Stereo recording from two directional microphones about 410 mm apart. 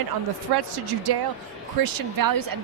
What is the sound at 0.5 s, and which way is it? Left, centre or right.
Speech, right.